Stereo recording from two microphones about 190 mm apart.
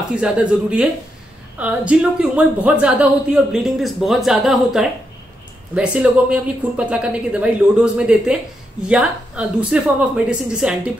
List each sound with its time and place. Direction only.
0.1 s speech: 5° right (ahead or behind)